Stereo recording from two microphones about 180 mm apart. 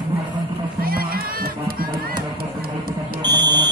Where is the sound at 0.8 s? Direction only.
55° right (ahead or behind).